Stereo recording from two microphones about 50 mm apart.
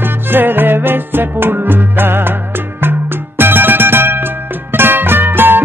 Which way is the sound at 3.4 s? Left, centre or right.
Right.